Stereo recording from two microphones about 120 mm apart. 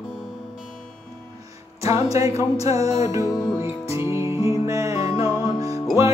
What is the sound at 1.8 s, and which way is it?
Music, 25° right (ahead or behind).